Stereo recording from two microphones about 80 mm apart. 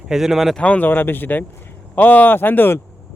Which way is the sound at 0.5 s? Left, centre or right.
Centre.